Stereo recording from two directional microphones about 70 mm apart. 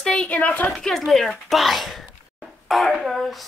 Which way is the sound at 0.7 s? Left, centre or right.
Centre.